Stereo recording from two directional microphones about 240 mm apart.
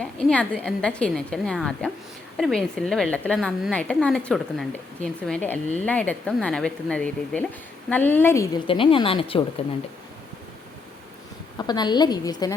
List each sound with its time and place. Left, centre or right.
0.0 s a woman's voice: centre; by 9.4 s left
11.5 s a woman's voice: centre